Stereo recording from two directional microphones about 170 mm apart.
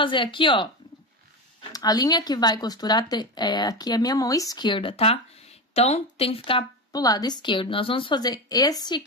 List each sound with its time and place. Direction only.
0.0 s speech: 30° left (ahead or behind)
1.7 s speech: 20° left (ahead or behind)